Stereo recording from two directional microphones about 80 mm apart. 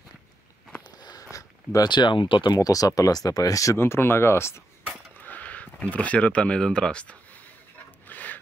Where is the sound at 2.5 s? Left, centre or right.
Left.